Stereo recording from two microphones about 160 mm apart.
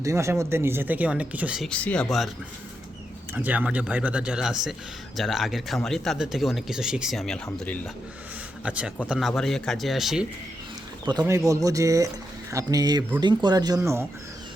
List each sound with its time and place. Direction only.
0.0 s speech: 20° right (ahead or behind)
1.7 s speech: 5° left (ahead or behind)
3.3 s speech: 10° right (ahead or behind)
8.6 s speech: 5° right (ahead or behind)
11.0 s speech: 25° right (ahead or behind)